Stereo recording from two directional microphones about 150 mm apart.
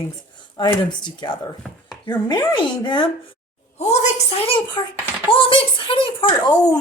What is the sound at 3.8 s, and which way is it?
A woman's voice, 45° left (ahead or behind).